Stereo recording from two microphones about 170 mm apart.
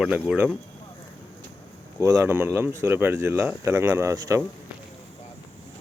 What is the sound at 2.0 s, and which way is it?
Speech, 15° right (ahead or behind).